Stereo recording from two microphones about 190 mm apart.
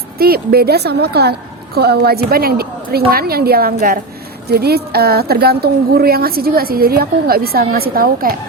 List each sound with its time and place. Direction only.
0.2 s a woman's voice: 50° right (ahead or behind)